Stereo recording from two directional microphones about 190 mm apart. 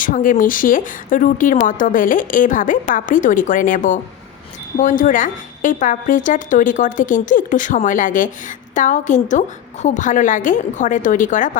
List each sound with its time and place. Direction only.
0.0 s speech: 45° left (ahead or behind)